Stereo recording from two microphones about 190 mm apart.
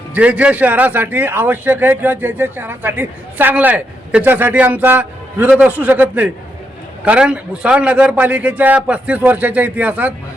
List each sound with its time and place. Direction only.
0.1 s a man's voice: 5° right (ahead or behind)